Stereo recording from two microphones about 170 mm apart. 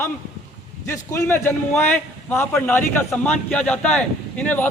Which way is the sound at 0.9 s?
15° left (ahead or behind).